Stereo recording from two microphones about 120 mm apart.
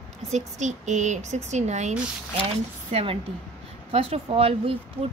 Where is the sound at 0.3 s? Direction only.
80° right.